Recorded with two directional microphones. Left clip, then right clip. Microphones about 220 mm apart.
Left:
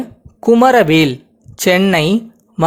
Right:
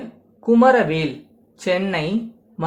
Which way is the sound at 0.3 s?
45° left (ahead or behind).